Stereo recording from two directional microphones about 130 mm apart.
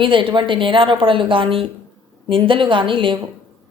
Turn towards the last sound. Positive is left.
turn(degrees=-40)  # may be behind; listen again after turning